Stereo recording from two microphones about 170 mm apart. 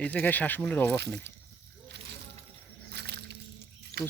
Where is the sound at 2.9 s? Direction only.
75° right (ahead or behind).